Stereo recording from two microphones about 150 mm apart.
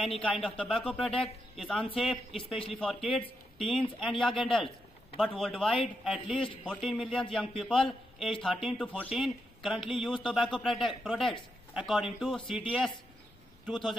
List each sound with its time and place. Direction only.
0.4 s a man's voice: 5° left (ahead or behind)
2.5 s speech: 35° left (ahead or behind)
2.8 s a man's voice: 5° left (ahead or behind)
6.3 s speech: 35° left (ahead or behind)
6.6 s a man's voice: centre (ahead or behind)
13.7 s a man's voice: centre (ahead or behind)